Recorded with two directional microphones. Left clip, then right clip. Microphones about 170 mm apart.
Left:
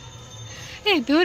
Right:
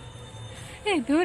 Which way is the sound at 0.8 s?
20° left (ahead or behind).